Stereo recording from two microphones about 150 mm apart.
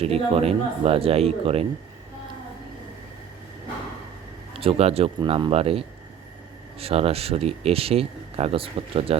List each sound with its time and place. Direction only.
0.0 s speech: 40° right (ahead or behind)
4.5 s speech: 40° right (ahead or behind)